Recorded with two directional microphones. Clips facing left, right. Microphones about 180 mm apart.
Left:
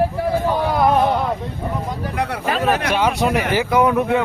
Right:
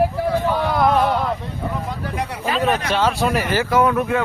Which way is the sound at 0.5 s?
15° left (ahead or behind).